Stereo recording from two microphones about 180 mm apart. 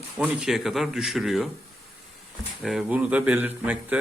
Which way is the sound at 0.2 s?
5° right (ahead or behind).